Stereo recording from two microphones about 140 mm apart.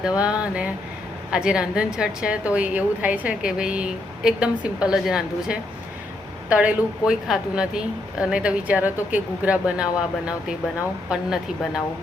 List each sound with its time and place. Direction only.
0.2 s a woman's voice: 10° right (ahead or behind)